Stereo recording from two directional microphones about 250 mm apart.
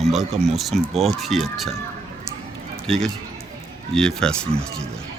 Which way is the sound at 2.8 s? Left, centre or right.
Centre.